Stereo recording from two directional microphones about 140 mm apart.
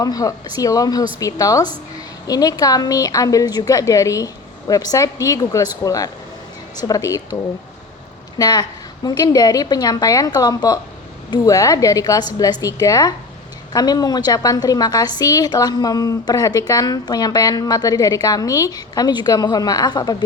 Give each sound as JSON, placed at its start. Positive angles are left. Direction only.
{"t": 0.0, "sound": "a woman's voice", "side_deg": 25}
{"t": 8.4, "sound": "a woman's voice", "side_deg": 30}